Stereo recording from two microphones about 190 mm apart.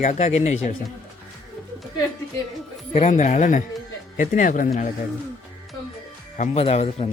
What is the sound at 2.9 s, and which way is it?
Speech, 35° left (ahead or behind).